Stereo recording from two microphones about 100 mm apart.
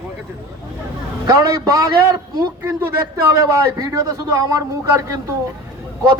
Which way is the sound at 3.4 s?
35° right (ahead or behind).